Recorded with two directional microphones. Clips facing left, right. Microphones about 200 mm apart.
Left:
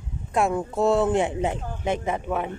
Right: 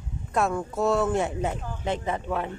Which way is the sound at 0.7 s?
30° left (ahead or behind).